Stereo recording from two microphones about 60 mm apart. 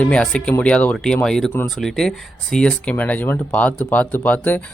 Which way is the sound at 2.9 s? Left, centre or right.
Left.